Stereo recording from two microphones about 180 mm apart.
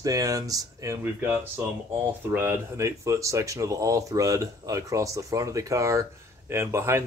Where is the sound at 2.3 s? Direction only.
15° right (ahead or behind).